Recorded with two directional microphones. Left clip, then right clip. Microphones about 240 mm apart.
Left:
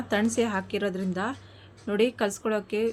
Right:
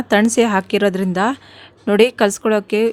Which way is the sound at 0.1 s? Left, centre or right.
Right.